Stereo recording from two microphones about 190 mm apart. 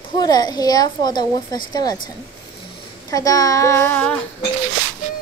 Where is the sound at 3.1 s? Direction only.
20° left (ahead or behind).